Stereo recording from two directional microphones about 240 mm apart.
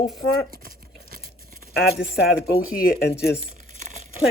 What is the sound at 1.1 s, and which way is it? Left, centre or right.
Tearing, right.